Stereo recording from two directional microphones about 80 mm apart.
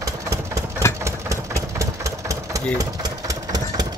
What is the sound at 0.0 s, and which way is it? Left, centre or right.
Engine, right.